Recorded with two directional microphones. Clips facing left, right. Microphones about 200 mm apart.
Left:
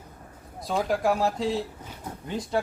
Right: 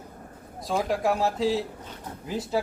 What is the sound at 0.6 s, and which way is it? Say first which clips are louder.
Speech: even; centre (ahead or behind).